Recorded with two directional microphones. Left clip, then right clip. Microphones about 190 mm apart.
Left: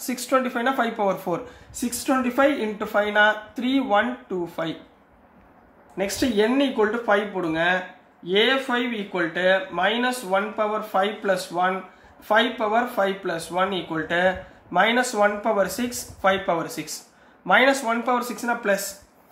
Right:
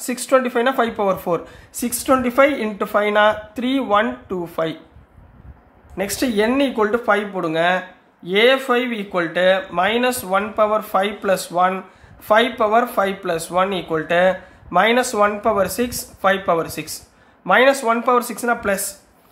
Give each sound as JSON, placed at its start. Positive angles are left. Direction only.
{"t": 0.0, "sound": "speech", "side_deg": -35}
{"t": 5.9, "sound": "speech", "side_deg": -45}